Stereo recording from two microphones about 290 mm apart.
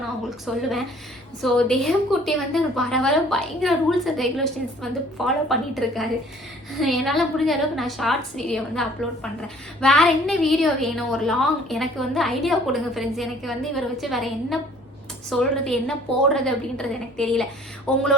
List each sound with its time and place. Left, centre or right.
0.3 s a woman's voice: centre